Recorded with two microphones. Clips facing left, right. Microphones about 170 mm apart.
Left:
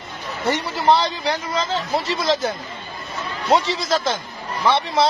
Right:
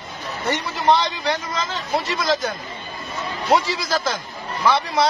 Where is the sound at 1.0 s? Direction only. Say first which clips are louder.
Left 1 dB; 30° left (ahead or behind).